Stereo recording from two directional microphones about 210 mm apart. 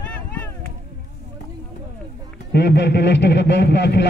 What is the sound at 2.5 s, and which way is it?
Music, 50° left (ahead or behind).